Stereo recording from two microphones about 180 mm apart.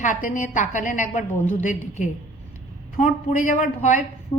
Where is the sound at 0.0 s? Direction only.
45° left (ahead or behind).